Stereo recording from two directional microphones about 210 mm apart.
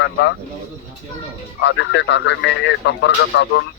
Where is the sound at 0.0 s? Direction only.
60° left (ahead or behind).